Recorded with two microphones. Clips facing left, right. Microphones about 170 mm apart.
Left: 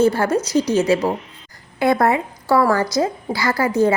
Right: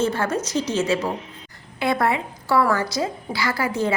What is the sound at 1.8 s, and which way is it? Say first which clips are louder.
A woman's voice: left 5 dB; 45° left (ahead or behind).